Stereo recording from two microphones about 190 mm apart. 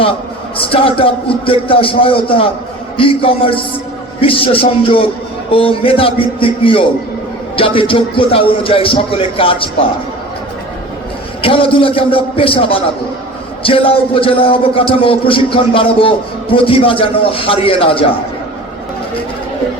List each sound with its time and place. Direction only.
0.0 s speech: 30° left (ahead or behind)
11.4 s speech: 30° left (ahead or behind)